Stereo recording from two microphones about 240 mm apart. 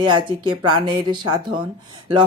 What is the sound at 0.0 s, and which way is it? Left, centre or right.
Speech, centre.